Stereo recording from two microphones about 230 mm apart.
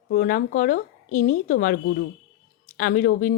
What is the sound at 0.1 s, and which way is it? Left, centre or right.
Speech, left.